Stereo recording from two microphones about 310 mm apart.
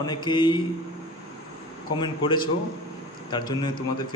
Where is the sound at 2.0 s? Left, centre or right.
Centre.